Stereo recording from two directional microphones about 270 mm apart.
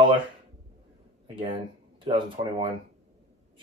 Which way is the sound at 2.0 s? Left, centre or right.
Centre.